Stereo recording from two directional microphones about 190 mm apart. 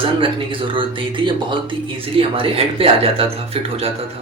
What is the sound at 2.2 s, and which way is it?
Speech, 30° right (ahead or behind).